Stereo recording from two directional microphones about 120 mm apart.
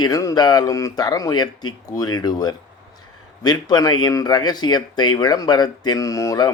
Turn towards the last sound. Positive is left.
turn(degrees=25)  # may be behind; listen again after turning